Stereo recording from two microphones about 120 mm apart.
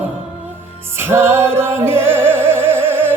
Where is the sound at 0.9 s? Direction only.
20° right (ahead or behind).